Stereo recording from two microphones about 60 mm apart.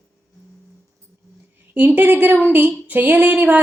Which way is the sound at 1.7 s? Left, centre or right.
Right.